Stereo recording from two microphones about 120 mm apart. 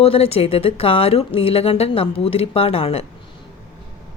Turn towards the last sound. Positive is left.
turn(degrees=55)  # may be behind; listen again after turning